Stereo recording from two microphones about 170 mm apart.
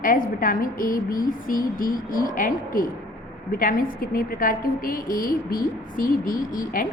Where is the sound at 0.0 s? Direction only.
55° left (ahead or behind).